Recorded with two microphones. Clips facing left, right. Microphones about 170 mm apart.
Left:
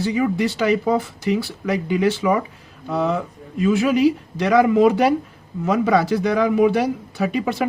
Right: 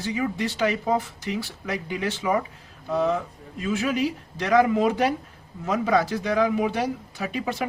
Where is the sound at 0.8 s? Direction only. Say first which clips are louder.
Left 5 dB; 85° left.